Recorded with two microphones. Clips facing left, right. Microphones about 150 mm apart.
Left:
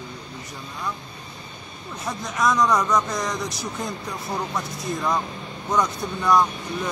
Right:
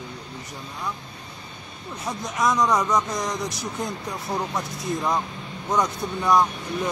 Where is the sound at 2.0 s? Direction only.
15° right (ahead or behind).